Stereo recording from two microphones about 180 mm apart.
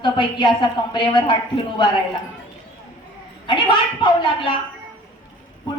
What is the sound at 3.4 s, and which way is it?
A woman's voice, 25° left (ahead or behind).